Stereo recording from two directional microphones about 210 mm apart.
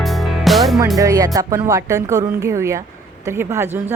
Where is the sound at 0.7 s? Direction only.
15° right (ahead or behind).